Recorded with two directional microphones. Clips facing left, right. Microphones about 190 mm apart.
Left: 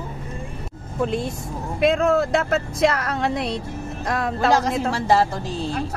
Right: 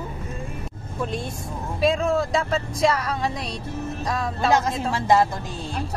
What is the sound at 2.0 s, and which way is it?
Speech, 75° left (ahead or behind).